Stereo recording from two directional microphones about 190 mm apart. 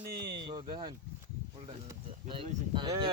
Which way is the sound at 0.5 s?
25° right (ahead or behind).